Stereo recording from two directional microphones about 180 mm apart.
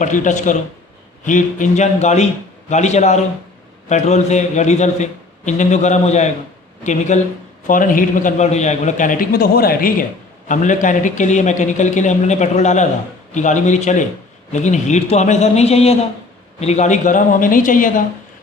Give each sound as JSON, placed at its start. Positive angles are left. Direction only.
{"t": 0.0, "sound": "a man's voice", "side_deg": 45}
{"t": 10.5, "sound": "a man's voice", "side_deg": 45}